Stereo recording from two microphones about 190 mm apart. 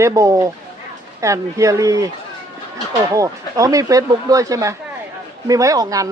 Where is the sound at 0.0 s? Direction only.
15° right (ahead or behind).